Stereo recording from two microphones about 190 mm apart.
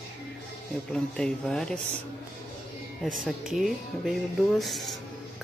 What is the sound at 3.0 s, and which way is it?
Speech, centre (ahead or behind).